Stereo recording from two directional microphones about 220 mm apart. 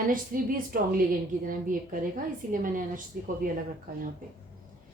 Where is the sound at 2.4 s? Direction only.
40° right (ahead or behind).